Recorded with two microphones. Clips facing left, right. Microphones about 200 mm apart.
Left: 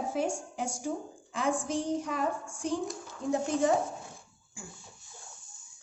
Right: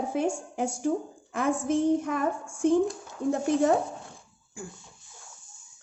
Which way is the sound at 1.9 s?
55° right (ahead or behind).